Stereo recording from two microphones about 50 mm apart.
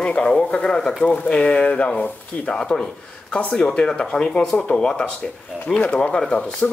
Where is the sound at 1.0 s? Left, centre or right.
Left.